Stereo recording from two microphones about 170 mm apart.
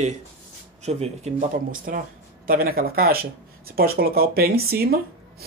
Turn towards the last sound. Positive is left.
turn(degrees=-65)  # may be behind; listen again after turning